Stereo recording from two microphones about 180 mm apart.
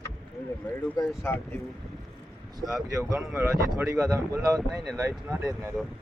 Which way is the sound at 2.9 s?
20° right (ahead or behind).